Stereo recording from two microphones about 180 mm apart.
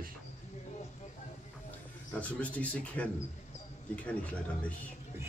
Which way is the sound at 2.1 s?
10° left (ahead or behind).